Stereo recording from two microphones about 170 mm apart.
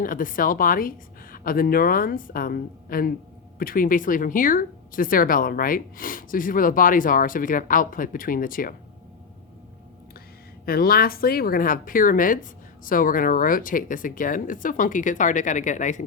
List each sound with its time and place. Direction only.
0.0 s a woman's voice: 55° left (ahead or behind)
10.7 s speech: 60° left (ahead or behind)